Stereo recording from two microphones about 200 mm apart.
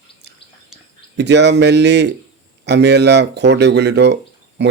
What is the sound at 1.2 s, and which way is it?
Speech, 60° right (ahead or behind).